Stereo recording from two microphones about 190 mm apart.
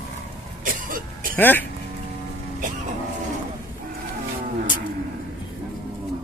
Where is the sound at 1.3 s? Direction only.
10° left (ahead or behind).